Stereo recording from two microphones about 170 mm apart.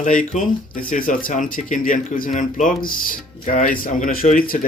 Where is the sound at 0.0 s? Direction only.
50° left (ahead or behind).